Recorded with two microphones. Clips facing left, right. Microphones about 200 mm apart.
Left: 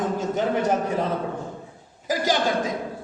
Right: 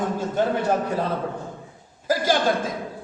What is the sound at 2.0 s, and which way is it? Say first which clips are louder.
Speech: right 2 dB; 15° left (ahead or behind).